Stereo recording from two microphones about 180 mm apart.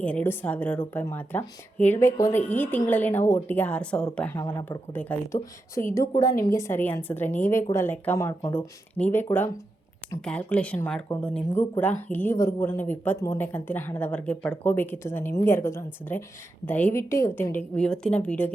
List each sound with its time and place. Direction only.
0.0 s a woman's voice: 10° left (ahead or behind)
4.4 s a woman's voice: 20° left (ahead or behind)